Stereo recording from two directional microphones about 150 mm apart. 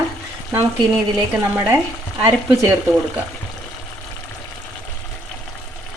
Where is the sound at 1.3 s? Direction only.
15° right (ahead or behind).